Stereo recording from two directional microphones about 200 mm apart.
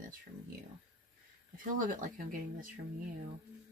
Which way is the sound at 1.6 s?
40° right (ahead or behind).